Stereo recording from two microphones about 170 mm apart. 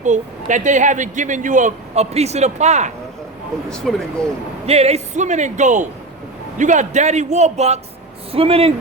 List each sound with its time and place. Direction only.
0.0 s a man's voice: 45° right (ahead or behind)
3.7 s speech: 5° left (ahead or behind)
4.6 s a man's voice: 40° right (ahead or behind)